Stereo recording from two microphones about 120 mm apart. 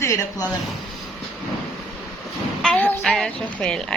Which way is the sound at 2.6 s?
10° left (ahead or behind).